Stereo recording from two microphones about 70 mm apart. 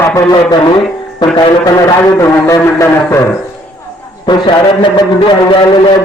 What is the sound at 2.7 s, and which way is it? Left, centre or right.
Speech, left.